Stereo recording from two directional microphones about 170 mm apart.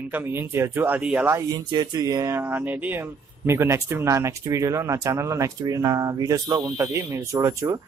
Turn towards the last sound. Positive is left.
turn(degrees=-20)  # may be behind; listen again after turning